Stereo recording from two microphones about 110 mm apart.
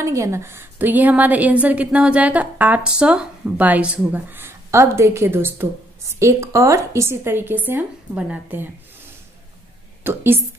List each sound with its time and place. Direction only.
0.0 s a woman's voice: 25° right (ahead or behind)
10.0 s a woman's voice: 20° right (ahead or behind)